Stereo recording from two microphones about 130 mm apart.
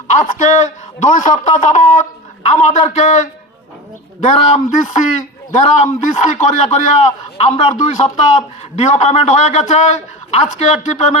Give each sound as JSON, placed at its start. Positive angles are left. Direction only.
{"t": 0.1, "sound": "a man's voice", "side_deg": 70}